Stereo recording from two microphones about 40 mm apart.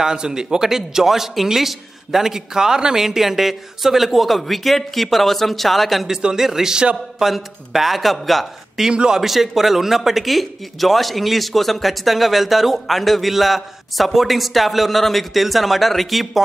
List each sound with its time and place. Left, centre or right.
0.0 s speech: centre
6.3 s speech: centre
8.8 s speech: centre
9.2 s speech: centre